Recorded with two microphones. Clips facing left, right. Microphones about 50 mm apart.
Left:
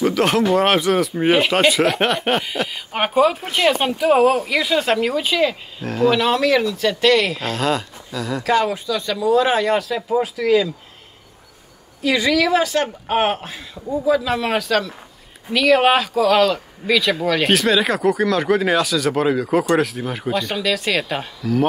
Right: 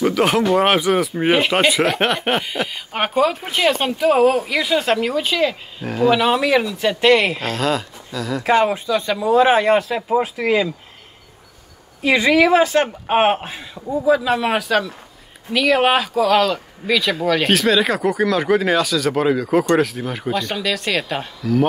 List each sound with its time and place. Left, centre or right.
0.0 s speech: centre; by 7.3 s right
7.4 s speech: centre
8.5 s speech: right
12.0 s speech: right
14.0 s a man's voice: centre